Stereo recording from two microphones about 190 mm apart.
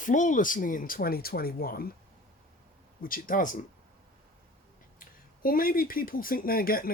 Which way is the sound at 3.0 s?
45° left (ahead or behind).